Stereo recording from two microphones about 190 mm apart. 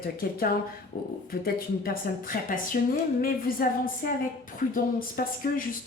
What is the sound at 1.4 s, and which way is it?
Speech, 50° left (ahead or behind).